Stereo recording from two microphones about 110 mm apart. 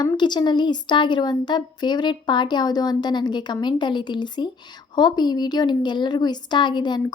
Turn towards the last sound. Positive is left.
turn(degrees=45)  # may be behind; listen again after turning